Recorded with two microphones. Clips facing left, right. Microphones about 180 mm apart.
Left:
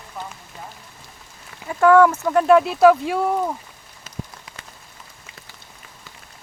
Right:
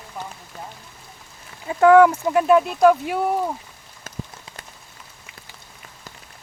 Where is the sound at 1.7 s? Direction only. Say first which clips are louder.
Right 1 dB; 20° right (ahead or behind).